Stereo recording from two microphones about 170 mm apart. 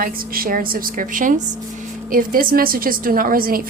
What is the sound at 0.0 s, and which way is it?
A woman's voice, 55° right (ahead or behind).